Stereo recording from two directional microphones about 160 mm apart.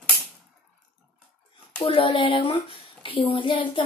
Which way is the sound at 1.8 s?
35° left (ahead or behind).